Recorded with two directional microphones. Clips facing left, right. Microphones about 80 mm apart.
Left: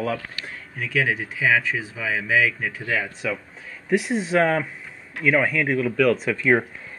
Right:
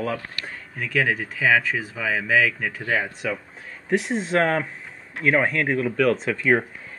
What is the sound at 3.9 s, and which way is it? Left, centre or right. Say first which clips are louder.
Speech: left 1 dB; centre.